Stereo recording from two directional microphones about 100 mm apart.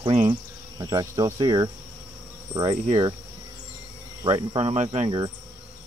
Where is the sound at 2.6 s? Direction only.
85° right.